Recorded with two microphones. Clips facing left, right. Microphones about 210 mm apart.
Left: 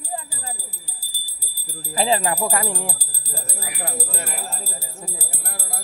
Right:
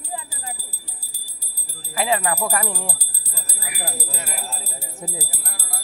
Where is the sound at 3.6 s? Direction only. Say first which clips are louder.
Left 1 dB; 5° right (ahead or behind).